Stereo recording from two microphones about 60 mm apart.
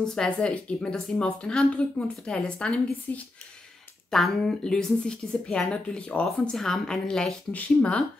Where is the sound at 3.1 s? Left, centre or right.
Left.